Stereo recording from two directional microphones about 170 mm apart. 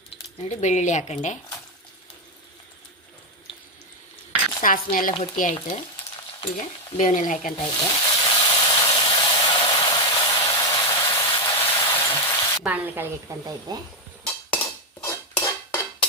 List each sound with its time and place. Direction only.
0.4 s speech: 45° left (ahead or behind)
4.6 s speech: 55° left (ahead or behind)
6.9 s speech: 45° left (ahead or behind)
7.5 s a sound: 25° left (ahead or behind)
12.6 s speech: 10° right (ahead or behind)
13.7 s stir: 25° right (ahead or behind)
14.3 s dishes: 10° left (ahead or behind)